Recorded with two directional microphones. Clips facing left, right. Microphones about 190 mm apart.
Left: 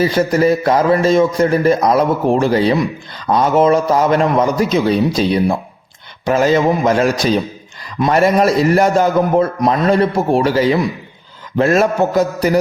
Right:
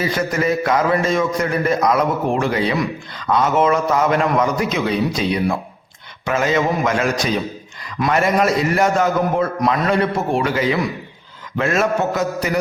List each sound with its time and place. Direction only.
0.0 s a man's voice: 30° left (ahead or behind)